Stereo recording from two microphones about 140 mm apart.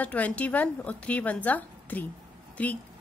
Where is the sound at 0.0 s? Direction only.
10° left (ahead or behind).